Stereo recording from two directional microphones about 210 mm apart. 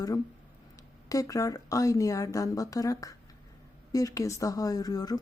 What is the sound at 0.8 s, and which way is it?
Speech, 15° left (ahead or behind).